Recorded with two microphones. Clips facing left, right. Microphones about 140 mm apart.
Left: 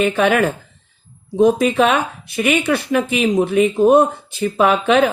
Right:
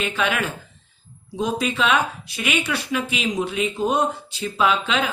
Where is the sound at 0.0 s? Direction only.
50° left (ahead or behind).